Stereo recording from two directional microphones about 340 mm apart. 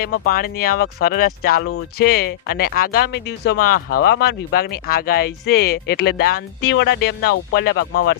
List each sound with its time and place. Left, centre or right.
0.0 s speech: left